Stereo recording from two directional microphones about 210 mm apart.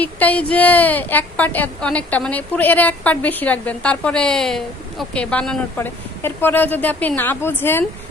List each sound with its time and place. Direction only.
0.0 s a woman's voice: 5° left (ahead or behind)